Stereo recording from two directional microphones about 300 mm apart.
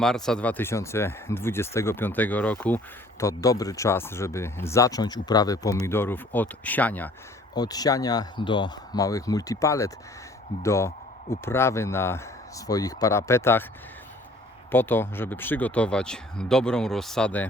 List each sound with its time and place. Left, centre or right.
0.0 s speech: centre
14.7 s speech: centre